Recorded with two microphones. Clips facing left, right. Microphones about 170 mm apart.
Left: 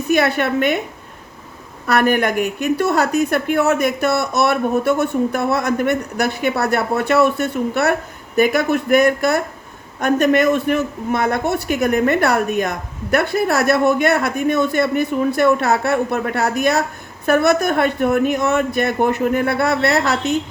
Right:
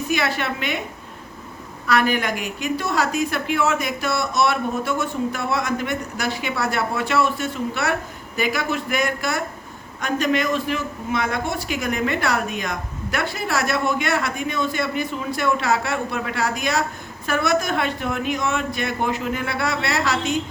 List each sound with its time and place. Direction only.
0.1 s a man's voice: 55° left (ahead or behind)
1.9 s a man's voice: 55° left (ahead or behind)